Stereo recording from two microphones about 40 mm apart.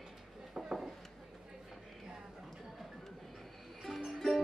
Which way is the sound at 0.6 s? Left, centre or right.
Centre.